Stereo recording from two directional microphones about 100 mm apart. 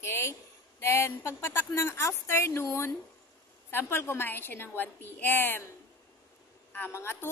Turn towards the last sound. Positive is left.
turn(degrees=25)  # may be behind; listen again after turning